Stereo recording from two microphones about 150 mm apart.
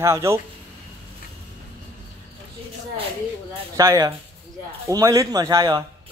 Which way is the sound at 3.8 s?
20° right (ahead or behind).